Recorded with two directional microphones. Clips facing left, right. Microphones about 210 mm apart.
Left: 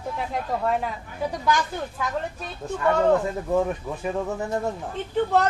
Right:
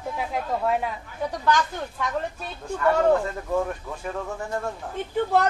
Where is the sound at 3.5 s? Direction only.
15° left (ahead or behind).